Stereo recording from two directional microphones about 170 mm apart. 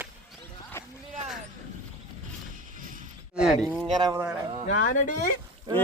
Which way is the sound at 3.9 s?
25° right (ahead or behind).